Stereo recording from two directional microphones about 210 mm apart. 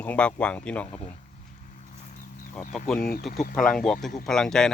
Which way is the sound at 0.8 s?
30° left (ahead or behind).